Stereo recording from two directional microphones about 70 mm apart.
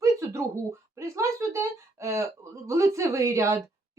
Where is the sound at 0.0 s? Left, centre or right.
Right.